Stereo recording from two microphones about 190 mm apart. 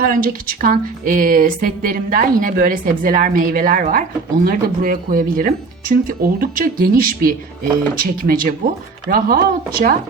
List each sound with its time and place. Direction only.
0.0 s speech: 50° right (ahead or behind)